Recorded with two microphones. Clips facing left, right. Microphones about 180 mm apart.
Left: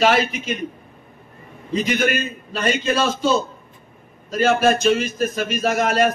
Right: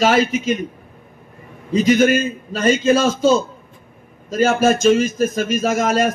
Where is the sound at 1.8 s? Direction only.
40° right (ahead or behind).